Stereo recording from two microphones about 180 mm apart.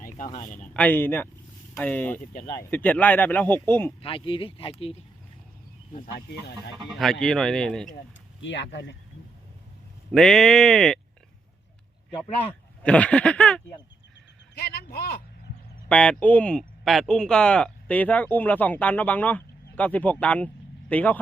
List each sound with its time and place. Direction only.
0.3 s speech: 30° left (ahead or behind)
0.7 s speech: 10° left (ahead or behind)
4.0 s speech: 30° left (ahead or behind)
6.0 s speech: 55° left (ahead or behind)
6.8 s speech: centre (ahead or behind)
8.4 s speech: 90° left
10.1 s speech: 5° left (ahead or behind)
12.8 s speech: 5° left (ahead or behind)
14.5 s a sound: 65° left (ahead or behind)
15.9 s speech: 5° left (ahead or behind)